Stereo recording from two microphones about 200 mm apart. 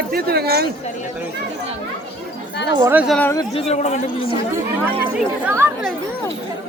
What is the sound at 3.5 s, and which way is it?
Speech, 30° left (ahead or behind).